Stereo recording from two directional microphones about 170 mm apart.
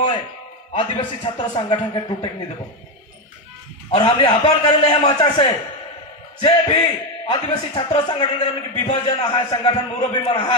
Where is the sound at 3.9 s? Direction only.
30° left (ahead or behind).